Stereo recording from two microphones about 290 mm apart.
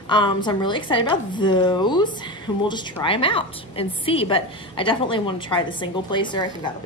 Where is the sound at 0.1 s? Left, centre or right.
Centre.